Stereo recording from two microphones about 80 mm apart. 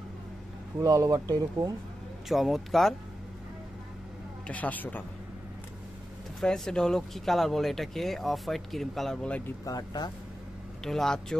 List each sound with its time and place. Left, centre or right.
0.7 s speech: right
2.2 s speech: centre
4.5 s speech: centre
6.4 s speech: centre
9.7 s speech: left
10.8 s speech: centre